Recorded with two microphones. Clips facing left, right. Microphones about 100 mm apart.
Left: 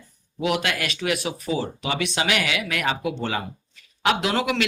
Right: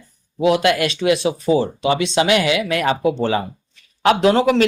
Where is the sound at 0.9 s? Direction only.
30° right (ahead or behind).